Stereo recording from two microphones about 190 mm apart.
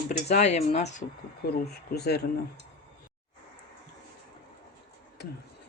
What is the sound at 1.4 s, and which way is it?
Speech, 55° left (ahead or behind).